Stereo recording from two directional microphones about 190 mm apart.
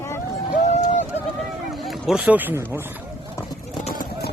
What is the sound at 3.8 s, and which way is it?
Vehicle, 35° left (ahead or behind).